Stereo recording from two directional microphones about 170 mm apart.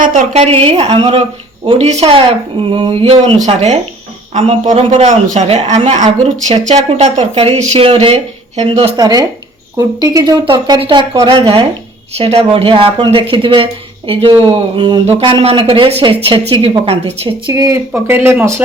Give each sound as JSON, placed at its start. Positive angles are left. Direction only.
{"t": 0.0, "sound": "a woman's voice", "side_deg": -50}
{"t": 0.4, "sound": "speech", "side_deg": -35}
{"t": 4.9, "sound": "a man's voice", "side_deg": -45}
{"t": 9.0, "sound": "speech", "side_deg": -25}
{"t": 17.5, "sound": "speech", "side_deg": -20}